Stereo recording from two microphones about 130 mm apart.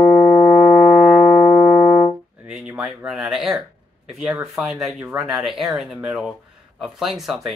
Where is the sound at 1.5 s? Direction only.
10° left (ahead or behind).